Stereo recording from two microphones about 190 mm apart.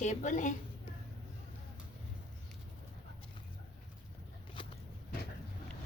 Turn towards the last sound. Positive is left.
turn(degrees=25)  # may be behind; listen again after turning